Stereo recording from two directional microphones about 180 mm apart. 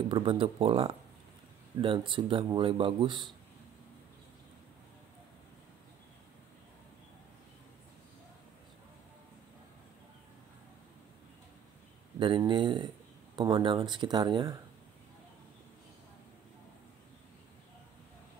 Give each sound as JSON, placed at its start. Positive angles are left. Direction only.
{"t": 0.1, "sound": "speech", "side_deg": -30}
{"t": 12.2, "sound": "speech", "side_deg": -25}